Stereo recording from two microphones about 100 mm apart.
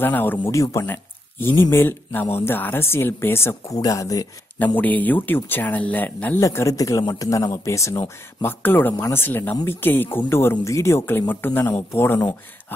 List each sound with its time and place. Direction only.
0.0 s speech: 20° left (ahead or behind)
0.5 s speech: 30° left (ahead or behind)
3.7 s speech: 35° left (ahead or behind)
4.7 s speech: 15° left (ahead or behind)
6.4 s speech: 30° left (ahead or behind)